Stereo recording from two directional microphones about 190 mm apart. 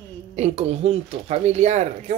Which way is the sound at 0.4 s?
35° right (ahead or behind).